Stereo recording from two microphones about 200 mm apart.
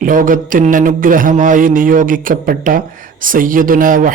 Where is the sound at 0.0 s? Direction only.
45° right (ahead or behind).